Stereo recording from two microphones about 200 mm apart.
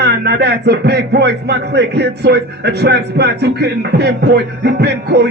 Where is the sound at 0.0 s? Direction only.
55° right (ahead or behind).